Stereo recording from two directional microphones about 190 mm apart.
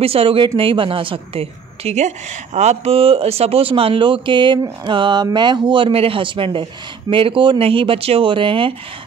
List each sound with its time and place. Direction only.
0.0 s a woman's voice: 30° right (ahead or behind)